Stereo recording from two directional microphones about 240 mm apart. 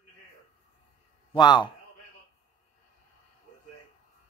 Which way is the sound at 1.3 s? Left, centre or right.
Centre.